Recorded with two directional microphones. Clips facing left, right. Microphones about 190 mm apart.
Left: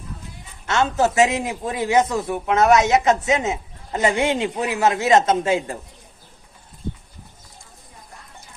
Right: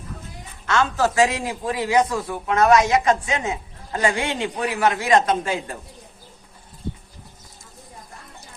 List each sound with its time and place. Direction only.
0.7 s a man's voice: 20° left (ahead or behind)